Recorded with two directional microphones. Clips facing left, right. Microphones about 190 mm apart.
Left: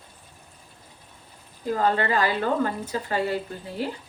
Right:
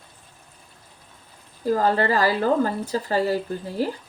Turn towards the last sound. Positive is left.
turn(degrees=-40)  # may be behind; listen again after turning